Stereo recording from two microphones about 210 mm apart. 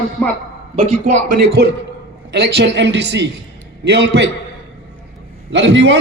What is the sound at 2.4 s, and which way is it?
A man's voice, 55° right (ahead or behind).